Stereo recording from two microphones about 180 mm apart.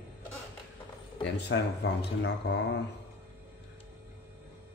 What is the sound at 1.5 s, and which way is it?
Speech, 90° left.